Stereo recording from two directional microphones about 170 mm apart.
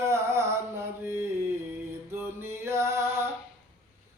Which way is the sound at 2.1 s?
15° right (ahead or behind).